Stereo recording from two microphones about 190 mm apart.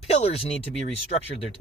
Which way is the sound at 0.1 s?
35° left (ahead or behind).